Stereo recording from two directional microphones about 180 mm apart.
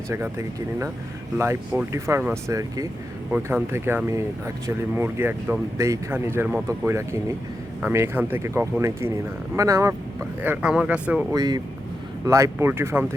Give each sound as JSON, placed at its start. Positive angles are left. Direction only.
{"t": 0.1, "sound": "speech", "side_deg": -15}
{"t": 10.4, "sound": "speech", "side_deg": -10}
{"t": 11.3, "sound": "speech", "side_deg": -20}